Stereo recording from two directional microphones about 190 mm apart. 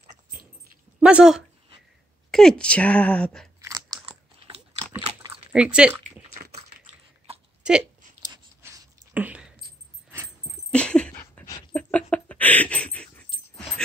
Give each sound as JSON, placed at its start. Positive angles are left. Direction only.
{"t": 1.0, "sound": "a woman's voice", "side_deg": -5}
{"t": 3.6, "sound": "chewing", "side_deg": -20}
{"t": 5.5, "sound": "speech", "side_deg": -5}
{"t": 6.0, "sound": "a sound", "side_deg": -45}
{"t": 8.6, "sound": "a sound", "side_deg": -10}
{"t": 10.7, "sound": "dog", "side_deg": 5}